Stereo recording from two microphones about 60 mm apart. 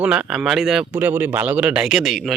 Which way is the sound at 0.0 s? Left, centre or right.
Centre.